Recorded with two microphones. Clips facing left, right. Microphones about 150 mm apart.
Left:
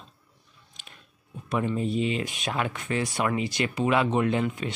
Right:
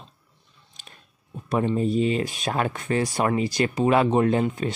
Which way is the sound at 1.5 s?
35° right (ahead or behind).